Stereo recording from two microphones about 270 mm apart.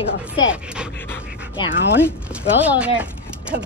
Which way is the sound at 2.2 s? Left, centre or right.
Centre.